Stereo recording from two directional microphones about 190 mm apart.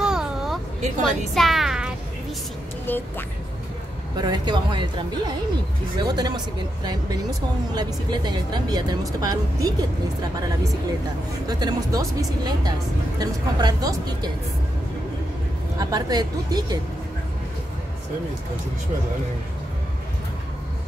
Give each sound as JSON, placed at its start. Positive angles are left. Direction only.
{"t": 0.0, "sound": "a sound", "side_deg": -5}
{"t": 0.7, "sound": "a woman's voice", "side_deg": -40}
{"t": 1.0, "sound": "speech", "side_deg": 0}
{"t": 2.9, "sound": "speech", "side_deg": 10}
{"t": 4.2, "sound": "speech", "side_deg": -25}
{"t": 11.4, "sound": "speech", "side_deg": -20}
{"t": 15.8, "sound": "speech", "side_deg": -20}